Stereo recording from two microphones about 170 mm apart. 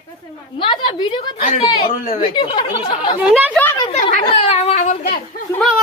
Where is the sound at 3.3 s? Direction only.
10° right (ahead or behind).